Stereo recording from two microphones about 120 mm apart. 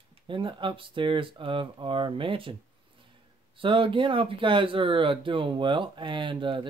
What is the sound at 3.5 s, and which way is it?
Speech, 45° right (ahead or behind).